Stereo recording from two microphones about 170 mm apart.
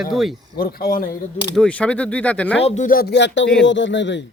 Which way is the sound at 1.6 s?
5° left (ahead or behind).